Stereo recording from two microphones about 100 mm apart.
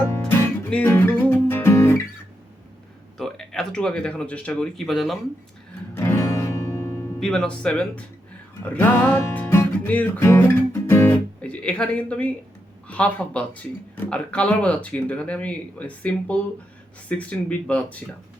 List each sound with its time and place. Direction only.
0.9 s guitar: 25° left (ahead or behind)
3.2 s speech: 5° left (ahead or behind)
4.9 s speech: centre (ahead or behind)
6.0 s music: 30° left (ahead or behind)
7.2 s speech: 5° left (ahead or behind)
9.5 s music: 20° left (ahead or behind)
11.4 s speech: 10° left (ahead or behind)